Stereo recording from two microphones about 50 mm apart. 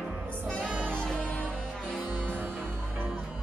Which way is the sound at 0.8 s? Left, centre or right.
Centre.